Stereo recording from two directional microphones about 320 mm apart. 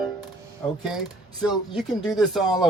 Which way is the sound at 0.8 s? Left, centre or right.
Centre.